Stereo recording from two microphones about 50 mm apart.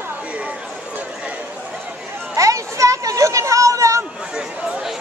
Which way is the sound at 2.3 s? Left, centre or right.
Right.